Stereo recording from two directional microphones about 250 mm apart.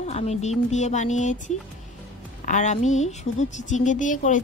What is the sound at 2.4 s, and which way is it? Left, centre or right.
Speech, left.